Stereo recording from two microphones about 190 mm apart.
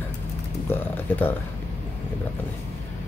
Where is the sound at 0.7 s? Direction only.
10° left (ahead or behind).